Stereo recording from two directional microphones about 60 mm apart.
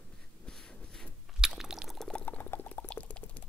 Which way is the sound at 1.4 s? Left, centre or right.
Centre.